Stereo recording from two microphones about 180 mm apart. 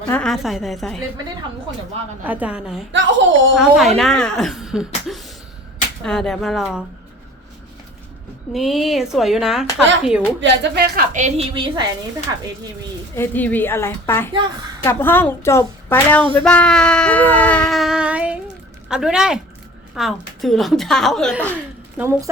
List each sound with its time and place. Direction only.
0.1 s a woman's voice: 5° left (ahead or behind)
2.2 s a woman's voice: 10° right (ahead or behind)
2.9 s speech: 90° right
3.8 s a woman's voice: centre (ahead or behind)
8.5 s a woman's voice: centre (ahead or behind)
10.4 s speech: 70° right (ahead or behind)
11.1 s a woman's voice: 40° right (ahead or behind)
13.1 s a woman's voice: 10° left (ahead or behind)
21.9 s a woman's voice: 15° right (ahead or behind)